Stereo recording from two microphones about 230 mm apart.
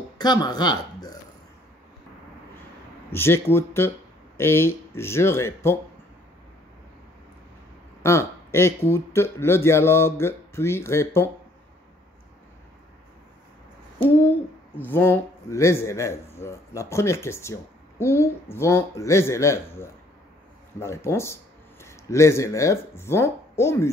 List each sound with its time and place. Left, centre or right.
0.2 s speech: centre
3.1 s a man's voice: centre
8.0 s a man's voice: centre
14.8 s a man's voice: centre
20.8 s a man's voice: centre